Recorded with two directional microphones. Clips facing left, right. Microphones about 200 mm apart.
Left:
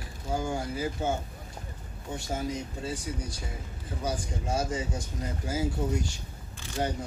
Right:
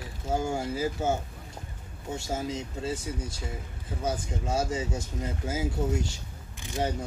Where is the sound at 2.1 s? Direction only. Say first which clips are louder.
Right 1 dB; 25° right (ahead or behind).